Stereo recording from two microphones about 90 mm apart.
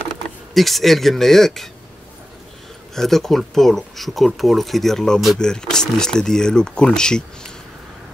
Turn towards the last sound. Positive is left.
turn(degrees=10)  # may be behind; listen again after turning